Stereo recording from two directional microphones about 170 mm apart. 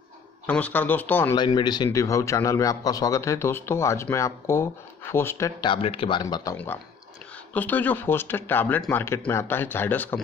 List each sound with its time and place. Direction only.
0.5 s a man's voice: 10° left (ahead or behind)
1.3 s a man's voice: 25° left (ahead or behind)
5.6 s speech: 30° left (ahead or behind)
6.2 s a man's voice: 20° left (ahead or behind)